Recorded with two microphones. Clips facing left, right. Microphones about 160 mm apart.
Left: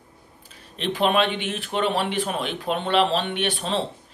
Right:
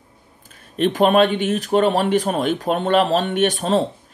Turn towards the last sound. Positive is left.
turn(degrees=-45)  # may be behind; listen again after turning